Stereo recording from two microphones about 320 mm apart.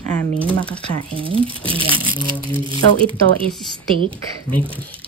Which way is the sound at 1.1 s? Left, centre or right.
Centre.